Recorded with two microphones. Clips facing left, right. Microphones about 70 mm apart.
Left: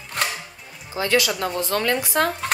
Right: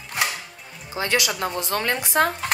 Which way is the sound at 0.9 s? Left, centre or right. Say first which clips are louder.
Left 3 dB; centre.